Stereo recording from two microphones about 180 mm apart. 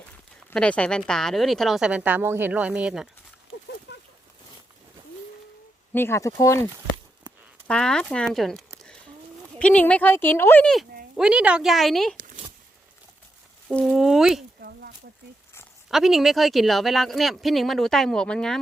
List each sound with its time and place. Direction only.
0.3 s speech: 5° left (ahead or behind)
3.9 s a sound: 70° left (ahead or behind)
5.9 s speech: 15° left (ahead or behind)
7.7 s speech: 5° left (ahead or behind)
13.7 s speech: centre (ahead or behind)
14.6 s a sound: 60° right (ahead or behind)
15.9 s speech: centre (ahead or behind)